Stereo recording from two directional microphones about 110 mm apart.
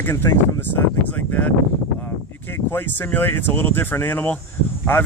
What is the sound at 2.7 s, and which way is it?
Speech, 15° left (ahead or behind).